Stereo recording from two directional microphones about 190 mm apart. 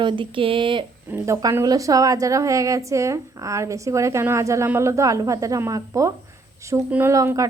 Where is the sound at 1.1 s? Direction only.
15° right (ahead or behind).